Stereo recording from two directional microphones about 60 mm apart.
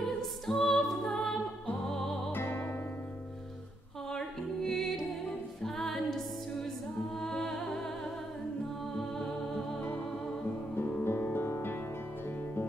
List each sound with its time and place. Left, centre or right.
0.0 s music: centre
2.3 s music: left
4.1 s music: centre
10.8 s music: left